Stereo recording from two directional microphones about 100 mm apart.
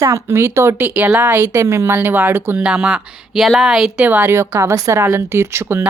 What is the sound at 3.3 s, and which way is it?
Speech, 5° right (ahead or behind).